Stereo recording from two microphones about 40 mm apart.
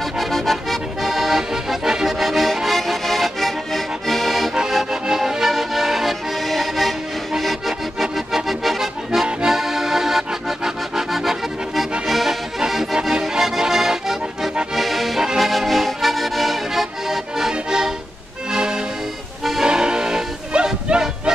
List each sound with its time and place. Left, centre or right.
0.2 s accordion: centre
5.0 s music: centre
7.3 s accordion: centre
15.2 s music: centre
18.5 s accordion: right
19.6 s music: centre